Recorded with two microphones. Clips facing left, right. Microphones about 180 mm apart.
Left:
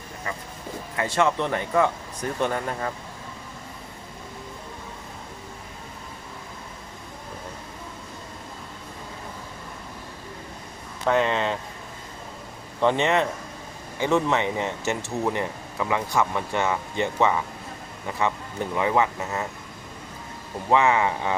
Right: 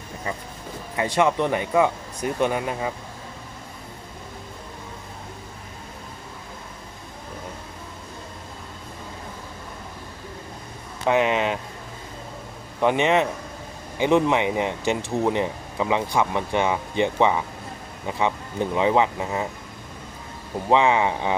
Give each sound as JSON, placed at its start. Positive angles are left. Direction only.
{"t": 0.9, "sound": "speech", "side_deg": -15}
{"t": 11.0, "sound": "speech", "side_deg": -15}
{"t": 12.8, "sound": "speech", "side_deg": -15}
{"t": 20.7, "sound": "speech", "side_deg": -20}